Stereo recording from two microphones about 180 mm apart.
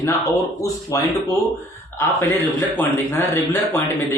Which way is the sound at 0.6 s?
20° left (ahead or behind).